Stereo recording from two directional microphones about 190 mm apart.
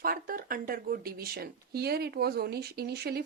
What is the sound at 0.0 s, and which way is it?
A woman's voice, 50° right (ahead or behind).